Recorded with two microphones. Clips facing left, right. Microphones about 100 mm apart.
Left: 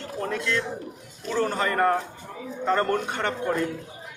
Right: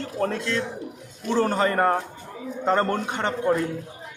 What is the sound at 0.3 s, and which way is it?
A man's voice, 35° right (ahead or behind).